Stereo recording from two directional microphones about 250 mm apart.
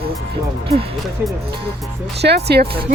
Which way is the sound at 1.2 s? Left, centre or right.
Centre.